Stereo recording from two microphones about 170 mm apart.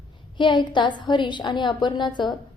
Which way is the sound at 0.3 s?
25° left (ahead or behind).